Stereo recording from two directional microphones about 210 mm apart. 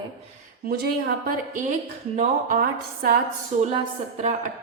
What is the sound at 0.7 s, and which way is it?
A woman's voice, 45° right (ahead or behind).